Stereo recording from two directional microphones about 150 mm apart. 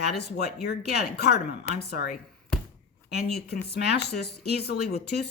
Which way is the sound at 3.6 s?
90° left.